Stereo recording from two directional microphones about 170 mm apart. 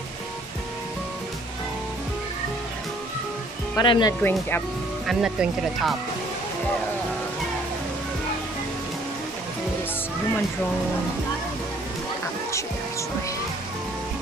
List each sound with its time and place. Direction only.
3.7 s speech: 25° left (ahead or behind)
4.2 s speech: 10° left (ahead or behind)
5.0 s speech: centre (ahead or behind)